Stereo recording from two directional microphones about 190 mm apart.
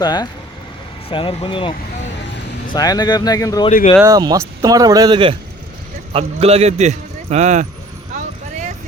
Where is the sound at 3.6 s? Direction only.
35° left (ahead or behind).